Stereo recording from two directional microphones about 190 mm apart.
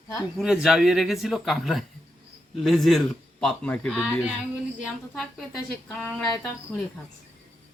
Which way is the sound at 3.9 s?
5° right (ahead or behind).